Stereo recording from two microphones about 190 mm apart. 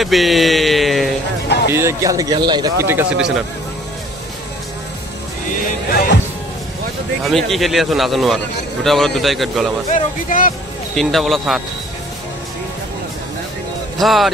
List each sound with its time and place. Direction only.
0.0 s a sound: centre (ahead or behind)
1.7 s a man's voice: 15° right (ahead or behind)
2.9 s speech: 10° right (ahead or behind)
7.2 s speech: centre (ahead or behind)
9.9 s speech: 45° left (ahead or behind)
11.0 s speech: centre (ahead or behind)
13.9 s speech: centre (ahead or behind)